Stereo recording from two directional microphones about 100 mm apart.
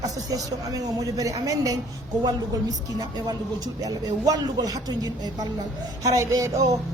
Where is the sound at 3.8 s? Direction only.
35° right (ahead or behind).